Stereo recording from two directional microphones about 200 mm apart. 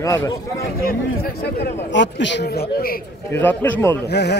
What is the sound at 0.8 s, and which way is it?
A man's voice, 50° left (ahead or behind).